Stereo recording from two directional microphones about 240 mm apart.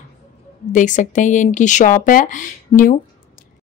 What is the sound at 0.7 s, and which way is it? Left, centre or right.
Speech, left.